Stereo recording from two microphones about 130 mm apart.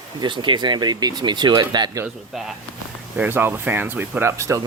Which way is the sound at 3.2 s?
15° right (ahead or behind).